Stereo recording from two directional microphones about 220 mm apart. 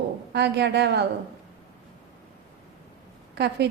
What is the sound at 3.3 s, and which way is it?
Speech, 50° right (ahead or behind).